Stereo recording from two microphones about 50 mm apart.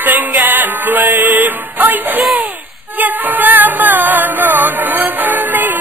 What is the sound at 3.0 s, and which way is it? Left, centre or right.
Music, right.